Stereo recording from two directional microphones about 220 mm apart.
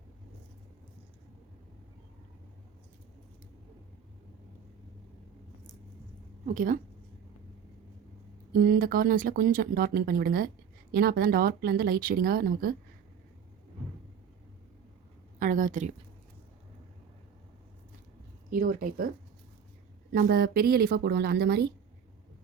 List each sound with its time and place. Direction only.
6.4 s a woman's voice: 35° right (ahead or behind)
8.5 s speech: 40° right (ahead or behind)
15.4 s speech: 35° right (ahead or behind)
18.5 s speech: 40° right (ahead or behind)
20.1 s speech: 40° right (ahead or behind)